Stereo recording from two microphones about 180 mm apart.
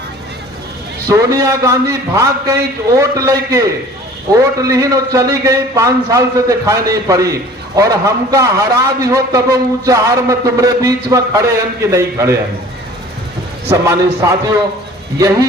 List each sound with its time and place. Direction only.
1.1 s a man's voice: 20° right (ahead or behind)
13.7 s a man's voice: 15° right (ahead or behind)